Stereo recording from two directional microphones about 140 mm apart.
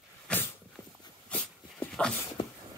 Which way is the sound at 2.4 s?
40° left (ahead or behind).